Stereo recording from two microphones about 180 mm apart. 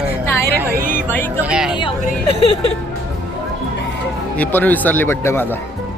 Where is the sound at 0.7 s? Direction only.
50° right (ahead or behind).